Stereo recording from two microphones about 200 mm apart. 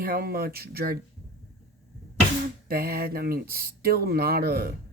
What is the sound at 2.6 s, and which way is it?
Speech, 50° right (ahead or behind).